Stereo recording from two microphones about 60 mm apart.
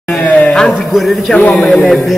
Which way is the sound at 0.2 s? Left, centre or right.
Left.